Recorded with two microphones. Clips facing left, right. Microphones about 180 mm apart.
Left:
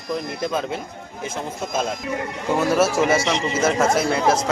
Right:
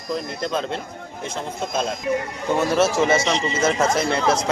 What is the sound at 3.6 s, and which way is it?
Speech, 5° left (ahead or behind).